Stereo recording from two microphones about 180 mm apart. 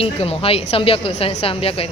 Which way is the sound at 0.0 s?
30° left (ahead or behind).